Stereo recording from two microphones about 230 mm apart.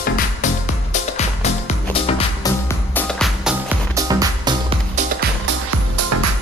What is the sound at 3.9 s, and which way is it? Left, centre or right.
Music, centre.